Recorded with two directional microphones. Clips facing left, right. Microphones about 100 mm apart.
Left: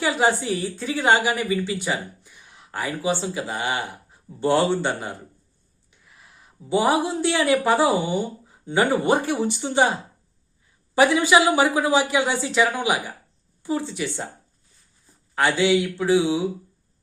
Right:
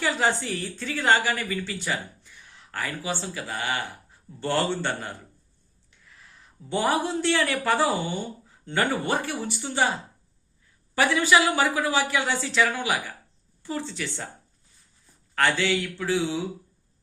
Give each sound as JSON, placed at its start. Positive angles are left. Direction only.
{"t": 0.0, "sound": "a woman's voice", "side_deg": 15}
{"t": 6.1, "sound": "speech", "side_deg": 15}
{"t": 10.9, "sound": "a woman's voice", "side_deg": 20}
{"t": 15.4, "sound": "a woman's voice", "side_deg": 15}